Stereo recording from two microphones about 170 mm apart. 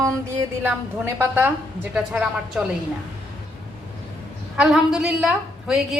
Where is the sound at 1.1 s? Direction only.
10° right (ahead or behind).